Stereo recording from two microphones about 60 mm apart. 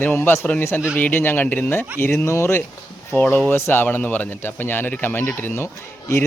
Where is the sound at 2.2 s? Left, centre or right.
Left.